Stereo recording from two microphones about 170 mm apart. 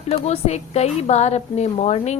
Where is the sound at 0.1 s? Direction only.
40° left (ahead or behind).